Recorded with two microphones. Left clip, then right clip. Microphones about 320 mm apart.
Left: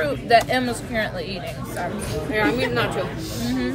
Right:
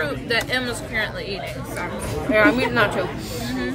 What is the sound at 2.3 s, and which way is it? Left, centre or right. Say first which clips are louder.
Speech: right 4 dB; centre.